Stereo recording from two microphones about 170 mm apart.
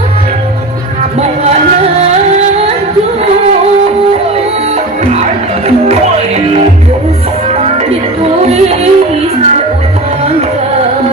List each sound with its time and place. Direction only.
5.1 s music: 40° right (ahead or behind)
8.4 s music: 40° right (ahead or behind)